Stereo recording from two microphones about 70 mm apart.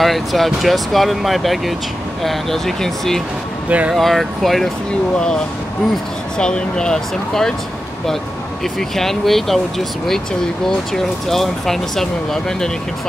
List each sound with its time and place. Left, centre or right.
0.0 s speech: centre
3.6 s speech: centre
3.9 s speech: centre
6.3 s speech: centre
8.7 s speech: centre
11.2 s speech: centre